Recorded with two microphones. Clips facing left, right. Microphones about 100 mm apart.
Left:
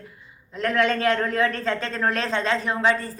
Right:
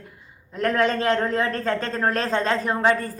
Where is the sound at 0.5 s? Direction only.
40° right (ahead or behind).